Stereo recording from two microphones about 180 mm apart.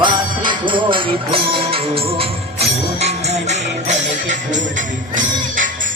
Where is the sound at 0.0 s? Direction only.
25° right (ahead or behind).